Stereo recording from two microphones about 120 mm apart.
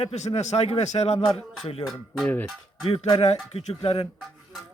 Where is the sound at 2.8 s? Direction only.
50° left (ahead or behind).